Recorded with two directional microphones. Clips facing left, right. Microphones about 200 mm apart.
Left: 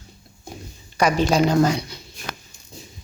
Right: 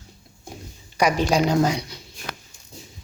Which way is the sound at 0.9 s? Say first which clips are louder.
Left 1 dB; 15° right (ahead or behind).